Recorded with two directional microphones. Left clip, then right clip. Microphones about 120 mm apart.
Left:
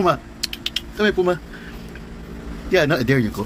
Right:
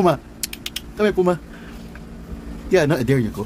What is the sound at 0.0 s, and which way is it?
Typing, 50° right (ahead or behind).